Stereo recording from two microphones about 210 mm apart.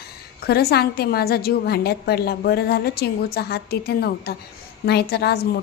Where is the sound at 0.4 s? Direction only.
50° left (ahead or behind).